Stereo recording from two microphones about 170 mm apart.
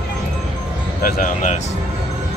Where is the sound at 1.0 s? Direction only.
55° left (ahead or behind).